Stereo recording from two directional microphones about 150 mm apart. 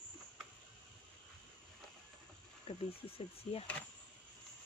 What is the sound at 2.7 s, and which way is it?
Wild animals, 35° left (ahead or behind).